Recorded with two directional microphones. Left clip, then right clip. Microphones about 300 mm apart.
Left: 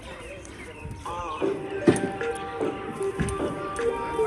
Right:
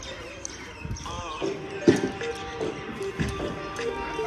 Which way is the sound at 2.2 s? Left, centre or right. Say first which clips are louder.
Left 2 dB; left.